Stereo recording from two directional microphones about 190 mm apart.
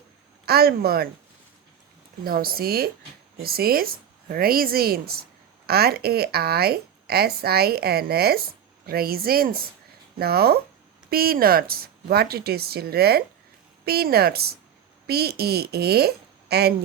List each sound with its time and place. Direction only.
0.4 s speech: 55° right (ahead or behind)
2.2 s a woman's voice: 50° right (ahead or behind)